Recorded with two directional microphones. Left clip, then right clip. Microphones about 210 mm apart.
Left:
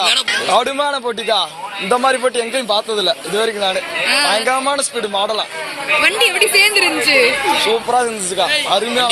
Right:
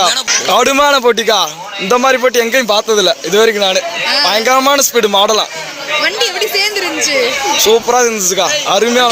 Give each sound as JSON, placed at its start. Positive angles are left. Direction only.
{"t": 0.5, "sound": "a man's voice", "side_deg": -45}
{"t": 4.0, "sound": "a man's voice", "side_deg": -5}
{"t": 4.3, "sound": "a man's voice", "side_deg": -45}
{"t": 6.0, "sound": "speech", "side_deg": 0}
{"t": 7.6, "sound": "a man's voice", "side_deg": -40}